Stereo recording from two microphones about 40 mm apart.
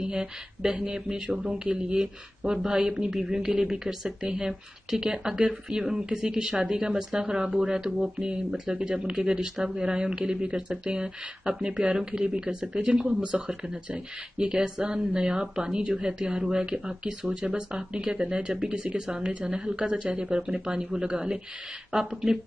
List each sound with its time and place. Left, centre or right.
0.0 s speech: right
14.4 s speech: right